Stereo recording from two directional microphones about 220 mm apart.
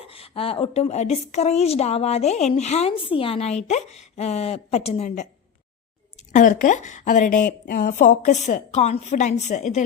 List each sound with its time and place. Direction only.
0.0 s a woman's voice: 25° left (ahead or behind)
6.3 s a woman's voice: 35° left (ahead or behind)